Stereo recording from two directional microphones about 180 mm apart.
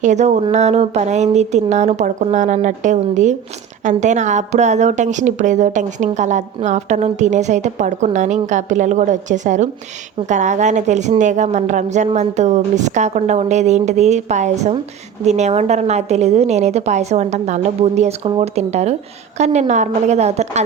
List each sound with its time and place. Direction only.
0.0 s a woman's voice: 40° right (ahead or behind)